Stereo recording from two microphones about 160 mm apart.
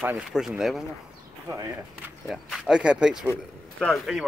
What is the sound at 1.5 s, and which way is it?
Speech, 15° right (ahead or behind).